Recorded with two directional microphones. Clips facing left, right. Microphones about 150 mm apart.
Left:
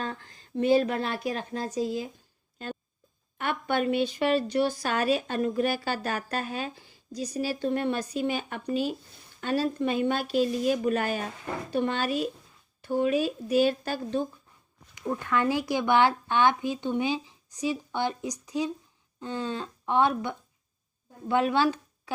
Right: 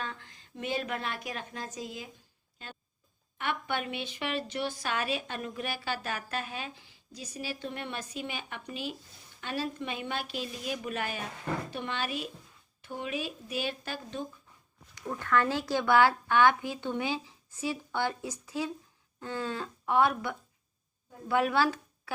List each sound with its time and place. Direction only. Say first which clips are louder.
0.0 s a woman's voice: left 5 dB; 40° left (ahead or behind)
2.6 s a woman's voice: left 11 dB; 45° left (ahead or behind)
15.2 s speech: left 1 dB; 15° left (ahead or behind)